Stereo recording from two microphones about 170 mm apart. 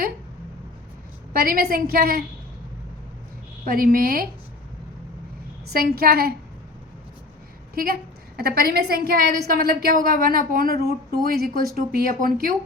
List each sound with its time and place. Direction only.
1.3 s a woman's voice: 60° right (ahead or behind)
3.7 s a woman's voice: 55° right (ahead or behind)
5.7 s a woman's voice: 65° right (ahead or behind)
7.8 s a woman's voice: 60° right (ahead or behind)